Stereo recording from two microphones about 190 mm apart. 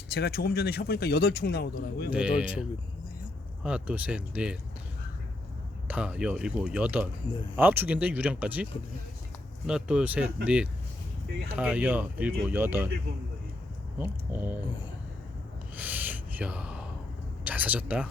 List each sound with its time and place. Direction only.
0.1 s a man's voice: 55° left (ahead or behind)
2.0 s speech: 5° right (ahead or behind)
5.9 s speech: 5° right (ahead or behind)
9.6 s speech: 5° right (ahead or behind)
14.0 s speech: 10° right (ahead or behind)
15.7 s a sound: 10° right (ahead or behind)
17.4 s speech: 10° right (ahead or behind)